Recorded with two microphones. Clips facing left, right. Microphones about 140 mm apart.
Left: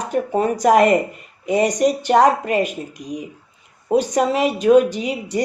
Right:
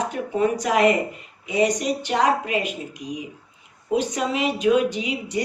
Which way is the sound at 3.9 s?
45° left (ahead or behind).